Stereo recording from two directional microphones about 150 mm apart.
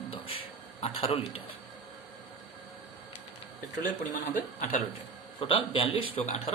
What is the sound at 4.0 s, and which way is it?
Speech, 55° left (ahead or behind).